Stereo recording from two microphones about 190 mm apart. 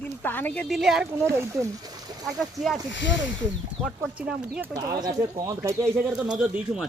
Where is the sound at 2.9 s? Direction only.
70° left (ahead or behind).